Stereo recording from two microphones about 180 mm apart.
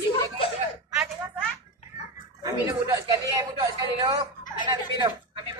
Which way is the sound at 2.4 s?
20° right (ahead or behind).